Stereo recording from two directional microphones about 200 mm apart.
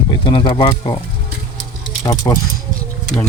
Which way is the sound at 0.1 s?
25° left (ahead or behind).